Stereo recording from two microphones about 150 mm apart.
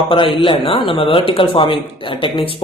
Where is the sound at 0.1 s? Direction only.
35° left (ahead or behind).